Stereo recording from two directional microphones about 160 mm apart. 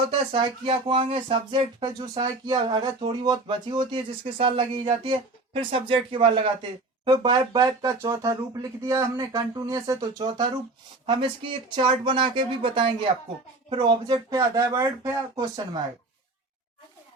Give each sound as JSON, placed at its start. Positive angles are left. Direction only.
{"t": 0.3, "sound": "speech", "side_deg": -30}